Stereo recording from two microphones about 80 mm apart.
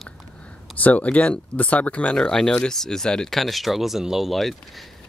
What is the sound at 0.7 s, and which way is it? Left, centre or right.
Speech, centre.